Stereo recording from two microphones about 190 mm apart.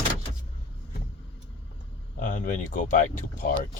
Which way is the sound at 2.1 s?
45° left (ahead or behind).